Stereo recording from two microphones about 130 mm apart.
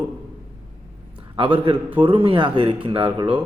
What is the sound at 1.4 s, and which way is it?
Speech, 40° right (ahead or behind).